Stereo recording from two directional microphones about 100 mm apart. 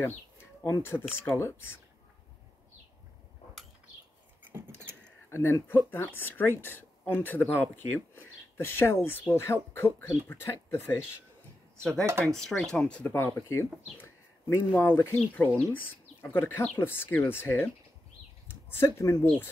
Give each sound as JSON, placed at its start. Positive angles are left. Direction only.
{"t": 0.0, "sound": "bird", "side_deg": 25}
{"t": 1.2, "sound": "speech", "side_deg": 25}
{"t": 4.4, "sound": "a sound", "side_deg": -20}
{"t": 5.3, "sound": "speech", "side_deg": 25}
{"t": 12.1, "sound": "speech", "side_deg": -30}
{"t": 12.4, "sound": "speech", "side_deg": 5}
{"t": 18.8, "sound": "speech", "side_deg": 25}